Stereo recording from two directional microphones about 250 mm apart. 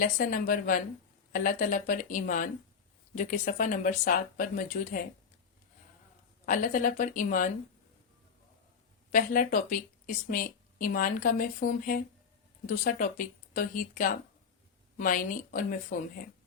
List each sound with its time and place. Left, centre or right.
0.0 s speech: left
6.4 s speech: left
9.1 s speech: left